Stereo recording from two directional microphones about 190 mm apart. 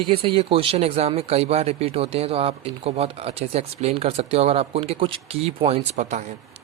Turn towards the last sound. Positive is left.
turn(degrees=-35)  # may be behind; listen again after turning